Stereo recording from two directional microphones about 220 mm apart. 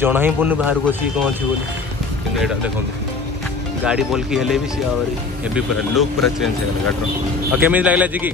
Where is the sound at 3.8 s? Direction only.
5° right (ahead or behind).